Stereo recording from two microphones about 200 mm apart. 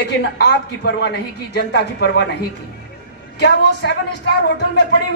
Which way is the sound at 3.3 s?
55° left (ahead or behind).